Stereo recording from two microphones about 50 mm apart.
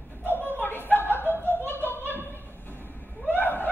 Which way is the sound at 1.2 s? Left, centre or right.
Left.